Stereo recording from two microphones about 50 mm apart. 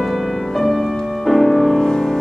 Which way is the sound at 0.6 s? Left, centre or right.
Centre.